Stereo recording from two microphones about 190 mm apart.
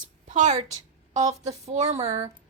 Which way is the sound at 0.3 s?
40° right (ahead or behind).